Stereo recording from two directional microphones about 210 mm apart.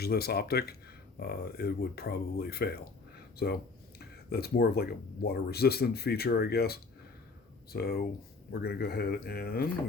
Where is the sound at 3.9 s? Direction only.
50° left (ahead or behind).